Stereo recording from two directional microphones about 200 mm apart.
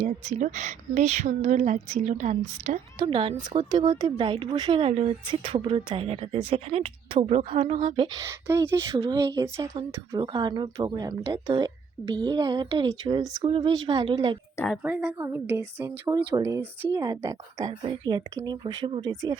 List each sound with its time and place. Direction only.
0.0 s a woman's voice: 35° right (ahead or behind)
14.7 s a woman's voice: 5° right (ahead or behind); by 19.4 s 25° right (ahead or behind)